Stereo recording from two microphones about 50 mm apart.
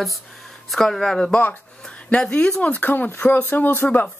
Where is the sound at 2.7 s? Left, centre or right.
Left.